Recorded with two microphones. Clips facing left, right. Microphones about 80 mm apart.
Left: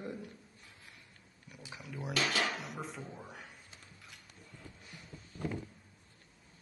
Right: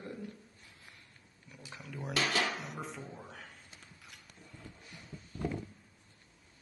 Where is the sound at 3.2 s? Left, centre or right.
Centre.